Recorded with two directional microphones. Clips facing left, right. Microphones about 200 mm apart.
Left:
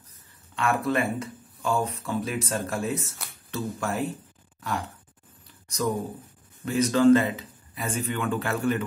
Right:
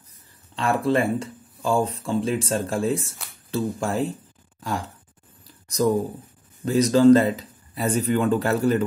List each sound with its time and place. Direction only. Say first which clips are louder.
0.6 s speech: right 4 dB; 30° right (ahead or behind)
5.7 s speech: right 7 dB; 35° right (ahead or behind)